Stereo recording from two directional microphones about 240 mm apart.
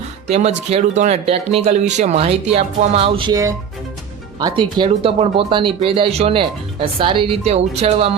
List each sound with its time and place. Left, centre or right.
0.3 s speech: right